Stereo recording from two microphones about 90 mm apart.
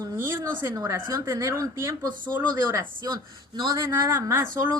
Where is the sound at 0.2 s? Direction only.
30° right (ahead or behind).